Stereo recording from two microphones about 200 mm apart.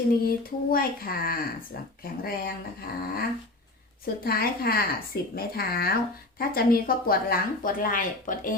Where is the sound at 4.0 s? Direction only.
50° left (ahead or behind).